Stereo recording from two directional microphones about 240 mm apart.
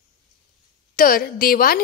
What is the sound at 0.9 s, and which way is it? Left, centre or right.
Speech, left.